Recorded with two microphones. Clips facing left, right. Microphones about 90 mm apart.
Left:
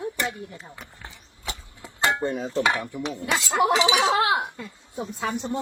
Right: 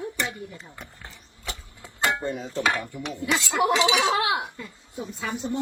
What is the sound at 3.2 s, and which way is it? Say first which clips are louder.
Speech: left 1 dB; 45° left (ahead or behind).